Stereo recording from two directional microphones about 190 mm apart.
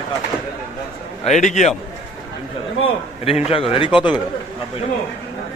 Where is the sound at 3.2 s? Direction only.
30° left (ahead or behind).